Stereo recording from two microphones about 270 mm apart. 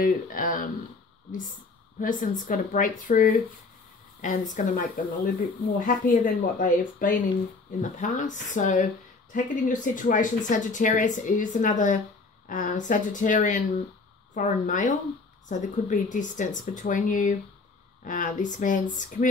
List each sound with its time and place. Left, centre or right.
0.0 s speech: left
2.0 s speech: left